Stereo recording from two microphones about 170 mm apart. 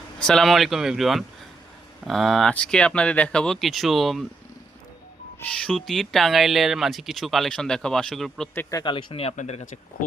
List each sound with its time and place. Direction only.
0.2 s speech: 5° left (ahead or behind)
5.5 s speech: 5° left (ahead or behind)
8.5 s speech: 25° left (ahead or behind); by 9.7 s 45° left (ahead or behind)